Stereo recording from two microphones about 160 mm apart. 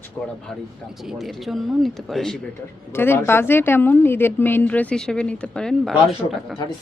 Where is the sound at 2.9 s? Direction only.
15° left (ahead or behind); by 6.5 s centre (ahead or behind).